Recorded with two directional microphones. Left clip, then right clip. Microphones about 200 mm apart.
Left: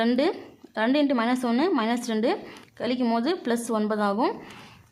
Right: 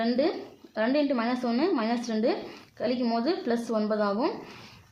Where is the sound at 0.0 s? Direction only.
25° left (ahead or behind).